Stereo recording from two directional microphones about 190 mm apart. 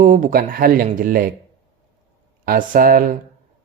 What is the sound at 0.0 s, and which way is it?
Speech, 45° right (ahead or behind).